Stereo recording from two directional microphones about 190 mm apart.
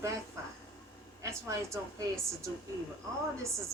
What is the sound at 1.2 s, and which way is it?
Speech, 15° right (ahead or behind).